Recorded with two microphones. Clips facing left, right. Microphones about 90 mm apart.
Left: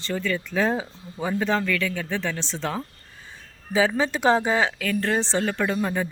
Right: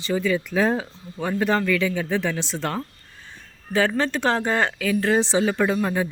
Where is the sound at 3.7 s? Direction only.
5° left (ahead or behind).